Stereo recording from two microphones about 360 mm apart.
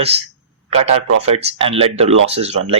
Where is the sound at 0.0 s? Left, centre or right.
Centre.